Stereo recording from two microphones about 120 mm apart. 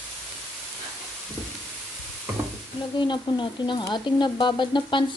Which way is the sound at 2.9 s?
40° left (ahead or behind).